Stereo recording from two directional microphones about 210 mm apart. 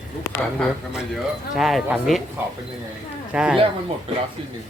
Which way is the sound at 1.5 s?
Centre (ahead or behind).